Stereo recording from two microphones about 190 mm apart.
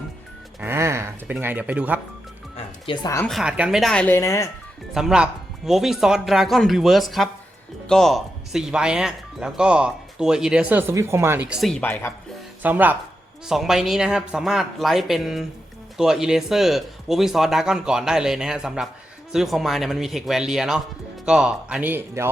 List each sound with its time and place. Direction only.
0.6 s speech: 15° right (ahead or behind)
2.8 s speech: 25° left (ahead or behind)
3.2 s speech: 5° right (ahead or behind); by 4.4 s 15° left (ahead or behind)
4.9 s speech: 5° right (ahead or behind)
12.6 s speech: 10° right (ahead or behind)